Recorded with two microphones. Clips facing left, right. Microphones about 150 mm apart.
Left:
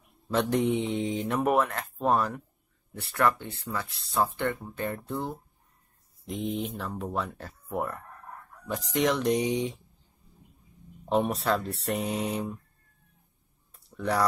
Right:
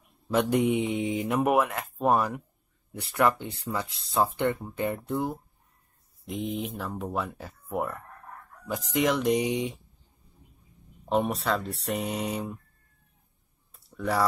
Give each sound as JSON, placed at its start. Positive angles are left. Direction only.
{"t": 0.3, "sound": "speech", "side_deg": -10}
{"t": 6.2, "sound": "speech", "side_deg": 0}
{"t": 11.1, "sound": "speech", "side_deg": 0}
{"t": 13.7, "sound": "a sound", "side_deg": 0}